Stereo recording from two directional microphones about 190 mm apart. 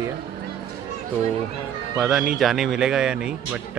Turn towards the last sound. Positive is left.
turn(degrees=-5)  # may be behind; listen again after turning